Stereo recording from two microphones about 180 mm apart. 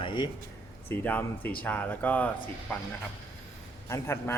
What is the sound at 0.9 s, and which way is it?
Speech, 10° left (ahead or behind).